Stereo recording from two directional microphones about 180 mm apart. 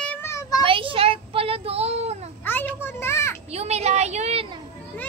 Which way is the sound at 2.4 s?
10° left (ahead or behind).